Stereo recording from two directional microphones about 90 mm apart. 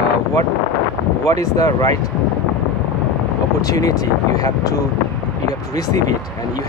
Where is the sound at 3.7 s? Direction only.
40° left (ahead or behind).